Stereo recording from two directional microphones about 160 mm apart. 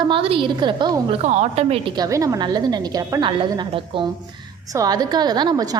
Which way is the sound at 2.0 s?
20° right (ahead or behind).